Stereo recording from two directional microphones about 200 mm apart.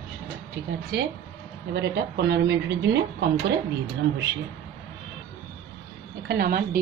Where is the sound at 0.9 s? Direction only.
50° right (ahead or behind).